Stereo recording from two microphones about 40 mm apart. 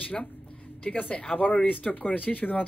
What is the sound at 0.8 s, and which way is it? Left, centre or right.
Speech, left.